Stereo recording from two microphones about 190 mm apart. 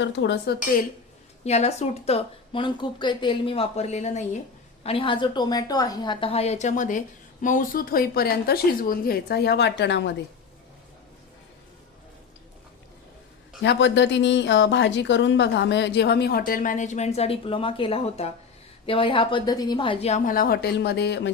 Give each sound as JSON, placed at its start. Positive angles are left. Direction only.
{"t": 0.0, "sound": "speech", "side_deg": 70}
{"t": 1.5, "sound": "a woman's voice", "side_deg": 35}
{"t": 13.6, "sound": "a woman's voice", "side_deg": 70}